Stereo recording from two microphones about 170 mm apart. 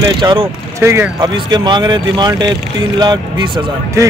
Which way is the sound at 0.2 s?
25° right (ahead or behind).